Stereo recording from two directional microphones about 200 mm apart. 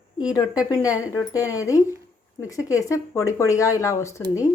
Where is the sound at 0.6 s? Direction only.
15° left (ahead or behind).